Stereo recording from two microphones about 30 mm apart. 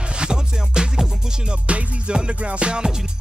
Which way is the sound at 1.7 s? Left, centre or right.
Right.